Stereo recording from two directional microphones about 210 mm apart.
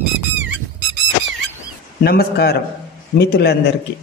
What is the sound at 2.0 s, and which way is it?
A man's voice, 45° left (ahead or behind).